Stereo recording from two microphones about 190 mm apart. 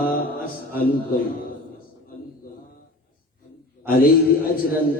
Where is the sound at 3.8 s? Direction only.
50° left (ahead or behind).